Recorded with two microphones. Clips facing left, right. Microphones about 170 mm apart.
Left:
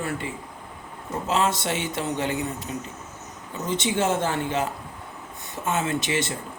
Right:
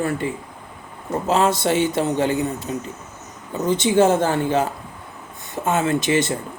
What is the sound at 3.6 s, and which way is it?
A man's voice, 35° right (ahead or behind).